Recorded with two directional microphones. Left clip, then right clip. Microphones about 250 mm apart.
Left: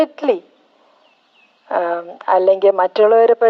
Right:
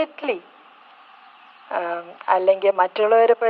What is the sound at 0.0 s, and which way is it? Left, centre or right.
Speech, left.